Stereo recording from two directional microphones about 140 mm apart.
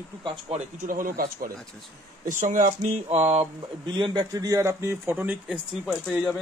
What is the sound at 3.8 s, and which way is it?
Speech, 35° right (ahead or behind).